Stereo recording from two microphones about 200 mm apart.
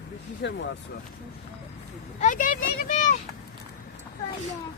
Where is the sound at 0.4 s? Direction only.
55° left (ahead or behind).